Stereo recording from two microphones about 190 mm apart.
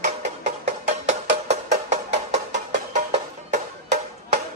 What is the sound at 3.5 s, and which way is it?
Music, 40° right (ahead or behind).